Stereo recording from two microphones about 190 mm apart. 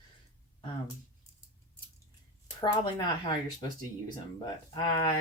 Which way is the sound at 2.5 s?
25° left (ahead or behind).